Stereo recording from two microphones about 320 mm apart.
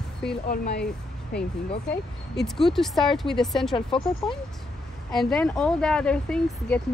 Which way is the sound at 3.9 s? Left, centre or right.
Centre.